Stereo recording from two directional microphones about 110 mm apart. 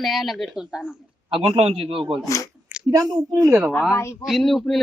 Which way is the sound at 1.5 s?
60° right (ahead or behind).